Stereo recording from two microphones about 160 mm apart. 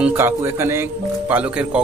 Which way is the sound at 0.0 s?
15° right (ahead or behind).